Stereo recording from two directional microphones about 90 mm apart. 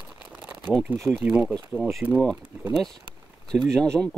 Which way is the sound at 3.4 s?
5° left (ahead or behind).